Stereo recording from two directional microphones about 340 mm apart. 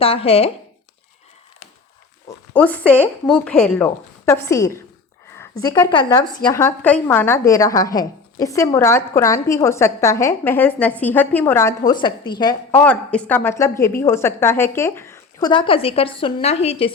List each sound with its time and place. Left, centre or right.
0.0 s a woman's voice: centre
2.5 s a woman's voice: centre